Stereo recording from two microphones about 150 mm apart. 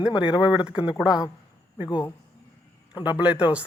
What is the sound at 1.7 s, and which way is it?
Speech, 30° left (ahead or behind).